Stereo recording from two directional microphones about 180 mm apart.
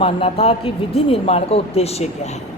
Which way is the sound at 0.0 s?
30° left (ahead or behind).